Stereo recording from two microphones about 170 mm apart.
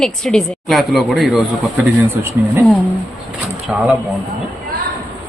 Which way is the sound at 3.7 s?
5° right (ahead or behind).